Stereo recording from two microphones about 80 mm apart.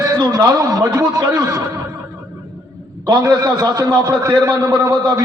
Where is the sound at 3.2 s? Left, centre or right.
Right.